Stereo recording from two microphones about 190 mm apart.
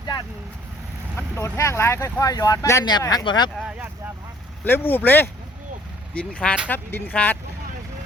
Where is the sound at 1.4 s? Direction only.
15° left (ahead or behind).